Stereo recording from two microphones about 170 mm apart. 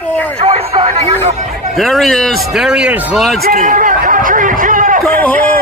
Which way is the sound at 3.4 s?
55° right (ahead or behind).